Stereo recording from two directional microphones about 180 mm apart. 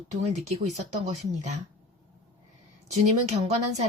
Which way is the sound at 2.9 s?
35° right (ahead or behind).